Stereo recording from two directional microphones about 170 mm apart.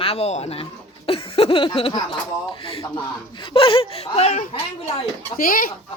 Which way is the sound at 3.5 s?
30° left (ahead or behind).